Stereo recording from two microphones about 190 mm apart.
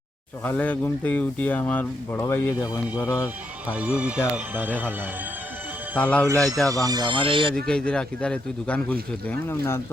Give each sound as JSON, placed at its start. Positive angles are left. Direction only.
{"t": 0.4, "sound": "speech", "side_deg": 10}
{"t": 3.7, "sound": "speech", "side_deg": -5}
{"t": 6.0, "sound": "speech", "side_deg": 5}
{"t": 6.7, "sound": "speech", "side_deg": -20}
{"t": 7.5, "sound": "a man's voice", "side_deg": 5}